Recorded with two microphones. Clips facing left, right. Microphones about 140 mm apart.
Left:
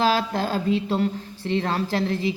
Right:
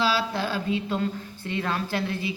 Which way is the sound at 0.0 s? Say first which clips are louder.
Left 3 dB; 45° left (ahead or behind).